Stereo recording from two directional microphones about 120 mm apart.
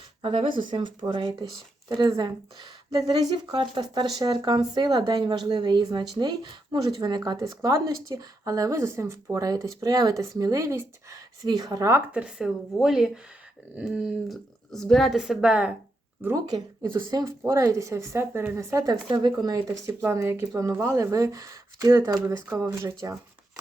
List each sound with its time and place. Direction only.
0.2 s speech: 50° right (ahead or behind); by 12.0 s 25° right (ahead or behind)
12.1 s speech: 5° right (ahead or behind)
17.0 s speech: 35° right (ahead or behind)
19.8 s speech: 20° right (ahead or behind)